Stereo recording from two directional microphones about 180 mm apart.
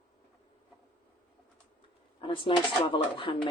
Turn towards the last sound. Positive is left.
turn(degrees=25)  # may be behind; listen again after turning